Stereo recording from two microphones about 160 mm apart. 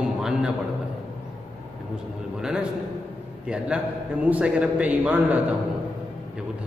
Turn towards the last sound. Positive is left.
turn(degrees=-10)  # may be behind; listen again after turning